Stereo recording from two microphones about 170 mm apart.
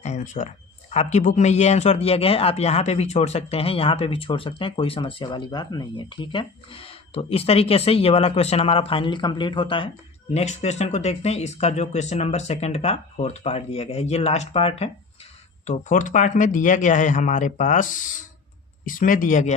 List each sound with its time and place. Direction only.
0.0 s speech: 40° left (ahead or behind)
10.3 s speech: 40° left (ahead or behind)